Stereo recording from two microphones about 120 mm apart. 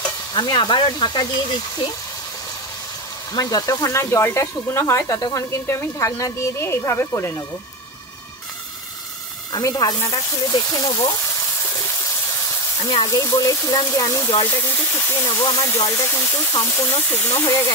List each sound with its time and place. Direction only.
0.3 s speech: 40° left (ahead or behind)
3.3 s speech: 30° left (ahead or behind)
9.5 s speech: 30° left (ahead or behind)
13.1 s speech: 25° left (ahead or behind)